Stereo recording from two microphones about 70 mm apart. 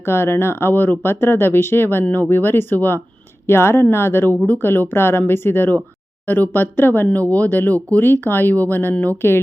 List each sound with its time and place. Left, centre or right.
0.0 s speech: left